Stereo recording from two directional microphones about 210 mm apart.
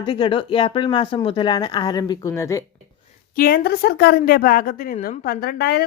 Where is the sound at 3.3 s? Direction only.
45° left (ahead or behind).